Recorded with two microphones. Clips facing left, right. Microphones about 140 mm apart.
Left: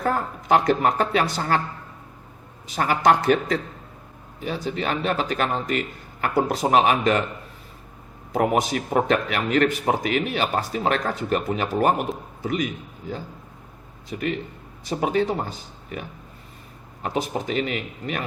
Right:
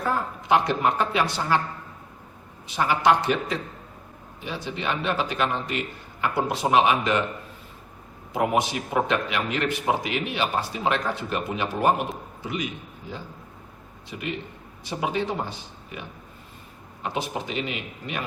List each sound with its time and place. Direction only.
0.0 s a man's voice: 45° left (ahead or behind)
2.7 s a man's voice: 45° left (ahead or behind)
8.3 s a man's voice: 45° left (ahead or behind)
14.1 s a man's voice: 45° left (ahead or behind)